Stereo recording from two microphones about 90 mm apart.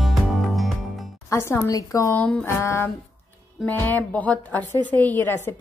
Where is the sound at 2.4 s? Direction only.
30° left (ahead or behind).